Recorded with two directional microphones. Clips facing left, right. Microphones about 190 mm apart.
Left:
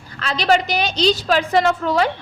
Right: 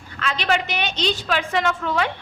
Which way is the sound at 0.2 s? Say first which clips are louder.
Left 5 dB; 35° left (ahead or behind).